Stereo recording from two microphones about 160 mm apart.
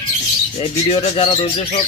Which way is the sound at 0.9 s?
40° left (ahead or behind).